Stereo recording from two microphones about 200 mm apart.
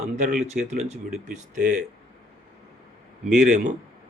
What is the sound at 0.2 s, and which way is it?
Speech, 40° right (ahead or behind).